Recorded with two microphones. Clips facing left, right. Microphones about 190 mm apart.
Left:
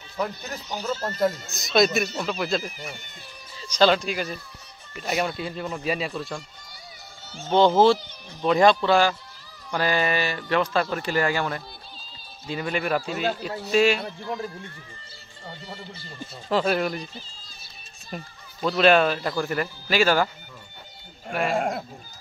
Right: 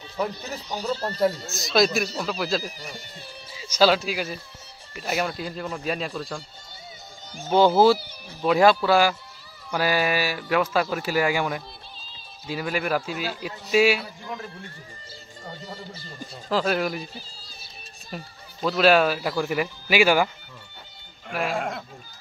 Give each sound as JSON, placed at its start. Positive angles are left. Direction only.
{"t": 0.8, "sound": "speech", "side_deg": -35}
{"t": 1.5, "sound": "speech", "side_deg": 0}
{"t": 2.6, "sound": "speech", "side_deg": -35}
{"t": 3.5, "sound": "speech", "side_deg": -10}
{"t": 7.2, "sound": "speech", "side_deg": -10}
{"t": 15.6, "sound": "speech", "side_deg": -40}
{"t": 16.4, "sound": "speech", "side_deg": 0}
{"t": 21.3, "sound": "speech", "side_deg": 0}